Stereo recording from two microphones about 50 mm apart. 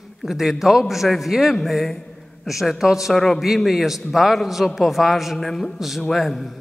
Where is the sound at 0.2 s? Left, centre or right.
Centre.